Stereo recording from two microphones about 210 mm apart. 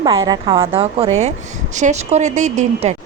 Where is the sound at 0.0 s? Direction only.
20° right (ahead or behind).